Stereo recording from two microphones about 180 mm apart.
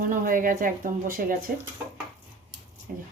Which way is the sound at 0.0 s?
45° right (ahead or behind).